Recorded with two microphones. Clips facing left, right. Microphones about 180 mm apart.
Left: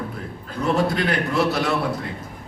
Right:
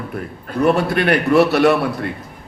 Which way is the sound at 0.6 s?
65° right (ahead or behind).